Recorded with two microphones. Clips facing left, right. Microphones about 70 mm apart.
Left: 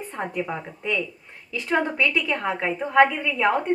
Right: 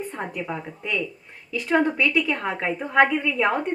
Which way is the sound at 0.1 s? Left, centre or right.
Centre.